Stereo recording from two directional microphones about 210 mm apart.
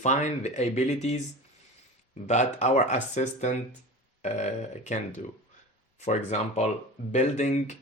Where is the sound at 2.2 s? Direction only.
35° left (ahead or behind).